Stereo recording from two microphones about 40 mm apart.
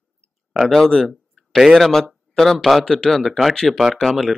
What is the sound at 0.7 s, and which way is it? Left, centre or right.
Speech, centre.